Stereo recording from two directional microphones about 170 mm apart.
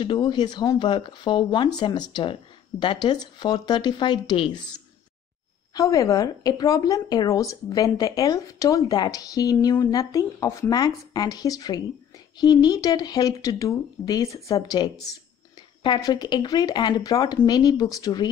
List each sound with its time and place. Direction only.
0.0 s speech: 30° left (ahead or behind)